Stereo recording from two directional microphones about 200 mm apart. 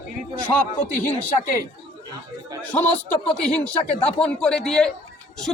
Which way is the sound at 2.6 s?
10° left (ahead or behind).